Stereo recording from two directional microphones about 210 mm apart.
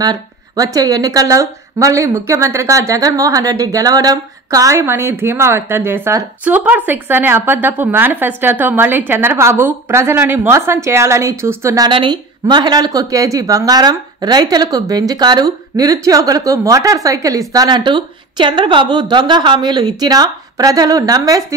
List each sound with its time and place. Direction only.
0.0 s a woman's voice: 15° right (ahead or behind)